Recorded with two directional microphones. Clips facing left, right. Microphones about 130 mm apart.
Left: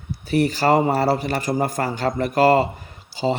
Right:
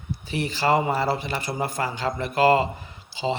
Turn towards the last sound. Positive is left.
turn(degrees=45)  # may be behind; listen again after turning